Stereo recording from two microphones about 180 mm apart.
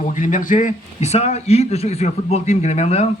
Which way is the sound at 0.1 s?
45° left (ahead or behind).